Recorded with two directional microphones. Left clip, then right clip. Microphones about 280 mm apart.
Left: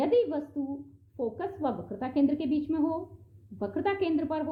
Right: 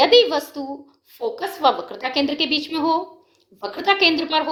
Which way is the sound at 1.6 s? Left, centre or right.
Centre.